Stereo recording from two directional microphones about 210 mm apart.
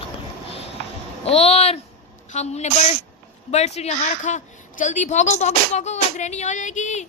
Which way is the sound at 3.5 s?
30° left (ahead or behind).